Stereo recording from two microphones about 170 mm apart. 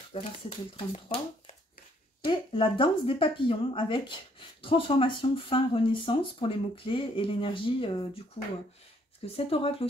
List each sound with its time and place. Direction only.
0.1 s speech: 35° left (ahead or behind)
9.2 s speech: 35° left (ahead or behind)